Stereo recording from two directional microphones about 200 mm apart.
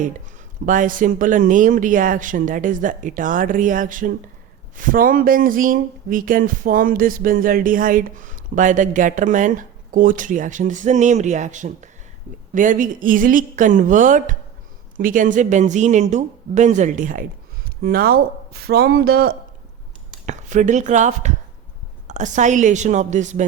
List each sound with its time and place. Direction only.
0.6 s speech: 40° right (ahead or behind)
20.2 s speech: 40° right (ahead or behind)